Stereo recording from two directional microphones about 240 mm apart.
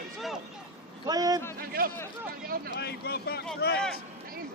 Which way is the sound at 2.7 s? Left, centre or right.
Left.